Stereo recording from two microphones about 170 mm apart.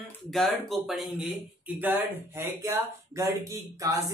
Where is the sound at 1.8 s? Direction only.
15° right (ahead or behind).